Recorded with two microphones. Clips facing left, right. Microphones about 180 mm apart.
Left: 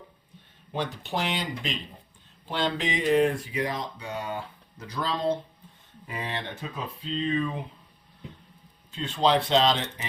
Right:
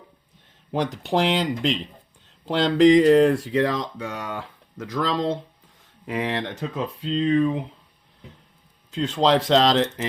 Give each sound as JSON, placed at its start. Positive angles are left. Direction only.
{"t": 0.7, "sound": "speech", "side_deg": -90}
{"t": 8.9, "sound": "speech", "side_deg": -90}